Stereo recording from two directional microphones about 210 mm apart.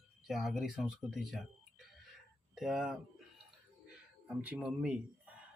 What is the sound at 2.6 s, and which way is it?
Speech, centre (ahead or behind).